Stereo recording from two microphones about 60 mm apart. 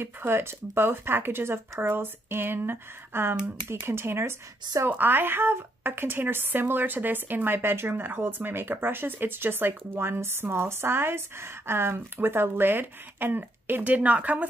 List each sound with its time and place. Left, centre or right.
0.0 s a woman's voice: right